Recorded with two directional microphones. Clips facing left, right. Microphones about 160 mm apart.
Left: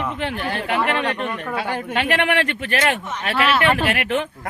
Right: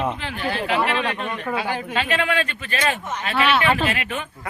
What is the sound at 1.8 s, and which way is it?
Speech, 70° left (ahead or behind).